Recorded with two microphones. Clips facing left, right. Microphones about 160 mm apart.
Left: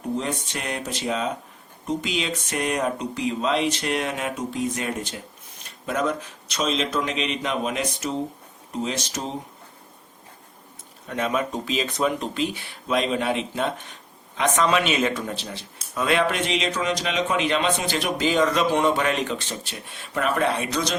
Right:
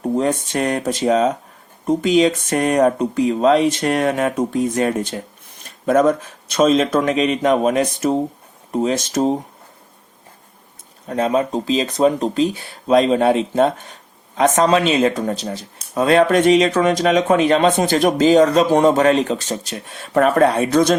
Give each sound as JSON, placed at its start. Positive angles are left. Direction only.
{"t": 0.2, "sound": "speech", "side_deg": -45}
{"t": 11.0, "sound": "speech", "side_deg": -35}